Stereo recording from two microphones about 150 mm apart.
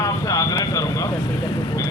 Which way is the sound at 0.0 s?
20° left (ahead or behind).